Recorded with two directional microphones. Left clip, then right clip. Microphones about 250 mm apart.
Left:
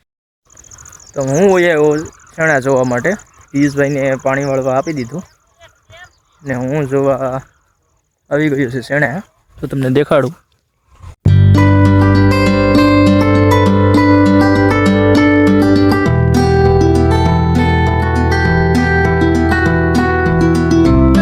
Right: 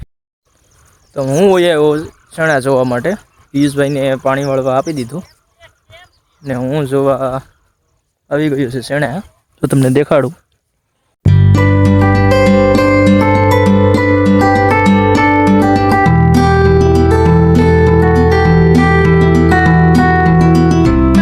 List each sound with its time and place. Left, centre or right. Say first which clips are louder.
0.8 s cricket: left 11 dB; left
1.2 s speech: right 1 dB; centre
5.0 s speech: right 1 dB; centre
5.5 s a sound: even; centre
6.4 s speech: right 1 dB; centre
8.3 s speech: even; centre
9.6 s speech: right 7 dB; right
9.8 s speech: even; centre
11.2 s music: left 1 dB; centre